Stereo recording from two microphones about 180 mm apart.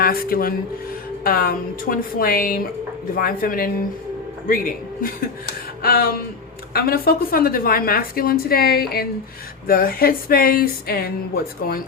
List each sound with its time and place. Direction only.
0.0 s a woman's voice: 55° left (ahead or behind)